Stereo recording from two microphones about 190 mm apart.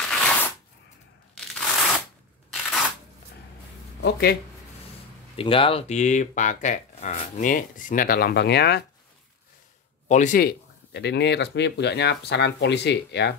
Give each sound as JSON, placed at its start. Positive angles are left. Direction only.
{"t": 0.1, "sound": "shuffling cards", "side_deg": 5}
{"t": 1.5, "sound": "a sound", "side_deg": 5}
{"t": 4.0, "sound": "speech", "side_deg": 55}
{"t": 5.3, "sound": "speech", "side_deg": 30}
{"t": 10.0, "sound": "speech", "side_deg": 40}